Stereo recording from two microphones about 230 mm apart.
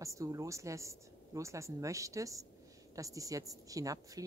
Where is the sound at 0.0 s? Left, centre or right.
Centre.